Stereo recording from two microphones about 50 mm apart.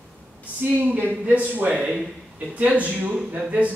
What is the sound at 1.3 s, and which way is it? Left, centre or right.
A man's voice, right.